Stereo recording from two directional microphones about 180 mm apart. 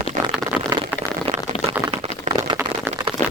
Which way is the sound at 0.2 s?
45° right (ahead or behind).